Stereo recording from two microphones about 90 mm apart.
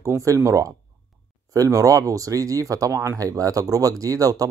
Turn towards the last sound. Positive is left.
turn(degrees=-40)  # may be behind; listen again after turning